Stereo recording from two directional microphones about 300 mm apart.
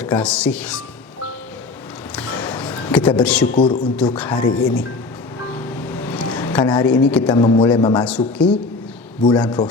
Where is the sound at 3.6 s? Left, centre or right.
Centre.